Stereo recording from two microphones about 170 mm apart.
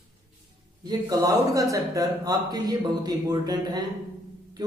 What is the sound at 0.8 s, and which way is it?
Speech, 20° right (ahead or behind).